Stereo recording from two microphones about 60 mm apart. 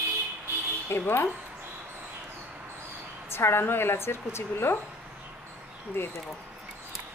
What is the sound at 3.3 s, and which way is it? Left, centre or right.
A woman's voice, left.